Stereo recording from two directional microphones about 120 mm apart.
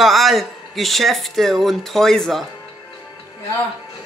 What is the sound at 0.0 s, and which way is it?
Speech, centre (ahead or behind).